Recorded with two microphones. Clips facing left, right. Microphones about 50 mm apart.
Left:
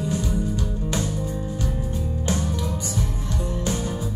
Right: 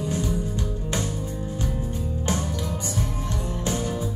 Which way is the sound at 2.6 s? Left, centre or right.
Right.